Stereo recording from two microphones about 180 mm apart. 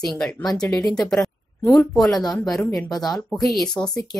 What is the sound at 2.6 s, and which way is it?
Speech, 20° left (ahead or behind).